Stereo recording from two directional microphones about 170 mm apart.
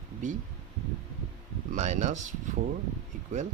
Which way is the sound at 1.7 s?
45° right (ahead or behind).